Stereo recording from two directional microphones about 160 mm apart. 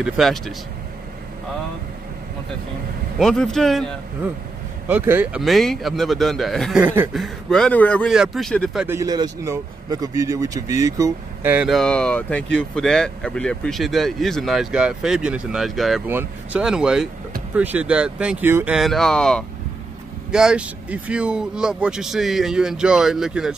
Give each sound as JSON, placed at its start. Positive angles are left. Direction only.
{"t": 0.0, "sound": "speech", "side_deg": 0}
{"t": 3.2, "sound": "speech", "side_deg": 5}
{"t": 4.8, "sound": "speech", "side_deg": -15}
{"t": 6.8, "sound": "speech", "side_deg": -10}
{"t": 7.2, "sound": "speech", "side_deg": 5}
{"t": 8.1, "sound": "speech", "side_deg": 0}
{"t": 8.8, "sound": "speech", "side_deg": -20}
{"t": 11.5, "sound": "speech", "side_deg": 0}
{"t": 18.8, "sound": "speech", "side_deg": 0}